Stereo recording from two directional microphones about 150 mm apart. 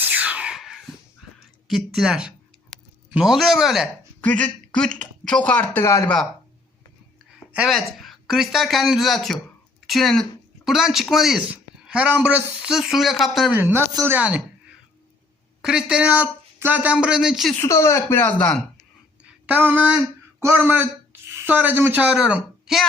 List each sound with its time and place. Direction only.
0.0 s a sound: 10° right (ahead or behind)
1.6 s speech: centre (ahead or behind)
4.2 s speech: 10° left (ahead or behind)
7.5 s speech: 5° right (ahead or behind)
13.6 s speech: 15° right (ahead or behind)
15.6 s speech: 5° right (ahead or behind)
17.6 s speech: 20° left (ahead or behind)
19.5 s speech: 10° right (ahead or behind)